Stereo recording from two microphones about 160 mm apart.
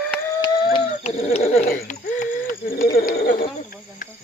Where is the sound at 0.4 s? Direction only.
30° left (ahead or behind).